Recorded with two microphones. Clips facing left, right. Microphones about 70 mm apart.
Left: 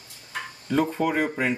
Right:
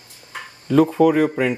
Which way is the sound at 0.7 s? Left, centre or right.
Right.